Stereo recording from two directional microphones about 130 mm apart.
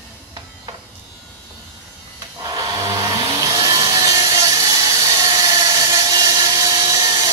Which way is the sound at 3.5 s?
30° right (ahead or behind).